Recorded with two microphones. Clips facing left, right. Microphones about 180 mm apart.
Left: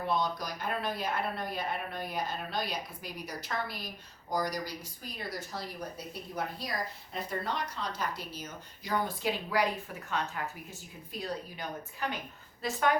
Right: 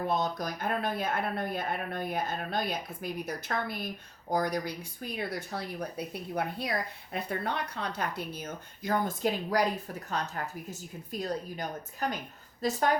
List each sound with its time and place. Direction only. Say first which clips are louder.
0.1 s a woman's voice: right 1 dB; 50° right (ahead or behind)